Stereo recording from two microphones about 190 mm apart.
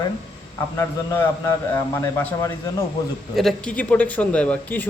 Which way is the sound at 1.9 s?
10° left (ahead or behind).